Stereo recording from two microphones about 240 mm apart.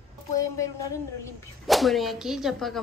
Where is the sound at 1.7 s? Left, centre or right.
Centre.